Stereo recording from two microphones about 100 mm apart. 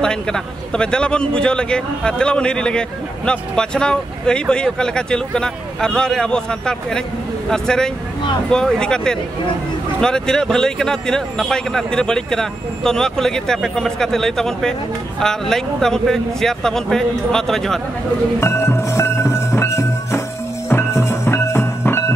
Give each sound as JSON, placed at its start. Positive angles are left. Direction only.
{"t": 0.0, "sound": "speech", "side_deg": 10}
{"t": 18.4, "sound": "music", "side_deg": 25}